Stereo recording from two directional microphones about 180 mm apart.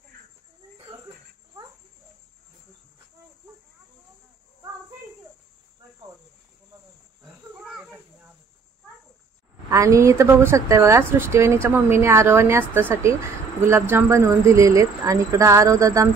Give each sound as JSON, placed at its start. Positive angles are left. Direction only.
{"t": 7.6, "sound": "insect", "side_deg": -5}
{"t": 9.7, "sound": "speech", "side_deg": -15}